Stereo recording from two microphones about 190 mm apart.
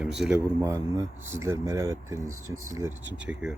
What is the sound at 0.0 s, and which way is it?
Speech, 5° right (ahead or behind).